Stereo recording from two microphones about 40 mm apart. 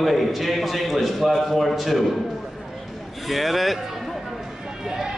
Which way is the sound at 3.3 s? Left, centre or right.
Centre.